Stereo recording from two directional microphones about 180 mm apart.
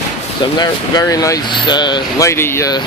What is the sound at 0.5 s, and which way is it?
Speech, 20° left (ahead or behind).